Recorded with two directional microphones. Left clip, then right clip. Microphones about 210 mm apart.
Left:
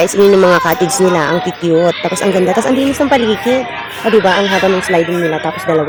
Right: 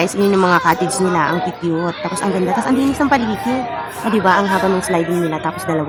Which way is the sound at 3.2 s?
15° right (ahead or behind).